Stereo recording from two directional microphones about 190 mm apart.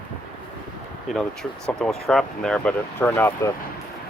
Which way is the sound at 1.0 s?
Centre (ahead or behind).